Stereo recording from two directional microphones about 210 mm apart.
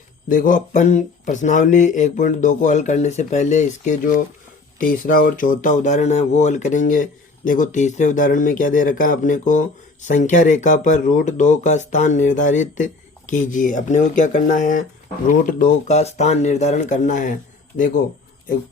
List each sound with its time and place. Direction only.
0.3 s speech: 40° left (ahead or behind)